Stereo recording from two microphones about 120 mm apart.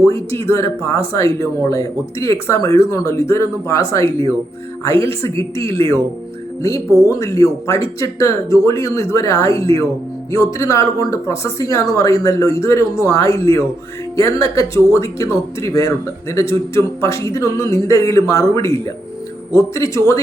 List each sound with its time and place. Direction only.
0.0 s speech: 25° left (ahead or behind)
5.4 s speech: 20° left (ahead or behind)